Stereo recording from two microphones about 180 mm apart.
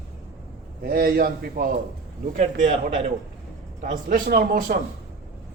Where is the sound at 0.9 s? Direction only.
55° right (ahead or behind).